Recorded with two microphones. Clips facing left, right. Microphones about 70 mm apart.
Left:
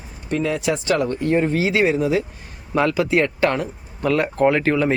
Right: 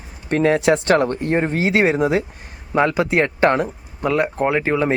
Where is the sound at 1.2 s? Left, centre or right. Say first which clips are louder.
Left 1 dB; right.